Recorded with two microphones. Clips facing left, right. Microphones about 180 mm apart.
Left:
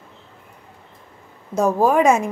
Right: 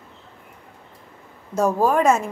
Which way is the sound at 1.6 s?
10° left (ahead or behind).